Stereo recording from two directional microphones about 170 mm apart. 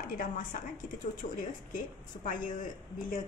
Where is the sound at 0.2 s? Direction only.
50° left (ahead or behind).